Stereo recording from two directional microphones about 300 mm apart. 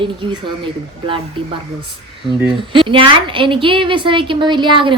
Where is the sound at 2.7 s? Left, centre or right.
Centre.